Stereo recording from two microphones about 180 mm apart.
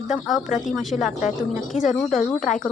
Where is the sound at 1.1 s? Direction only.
45° left (ahead or behind).